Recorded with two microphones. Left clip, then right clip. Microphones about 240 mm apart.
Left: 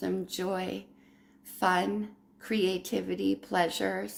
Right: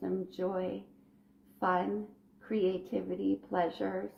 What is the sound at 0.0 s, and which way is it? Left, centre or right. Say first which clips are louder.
Speech: left 2 dB; left.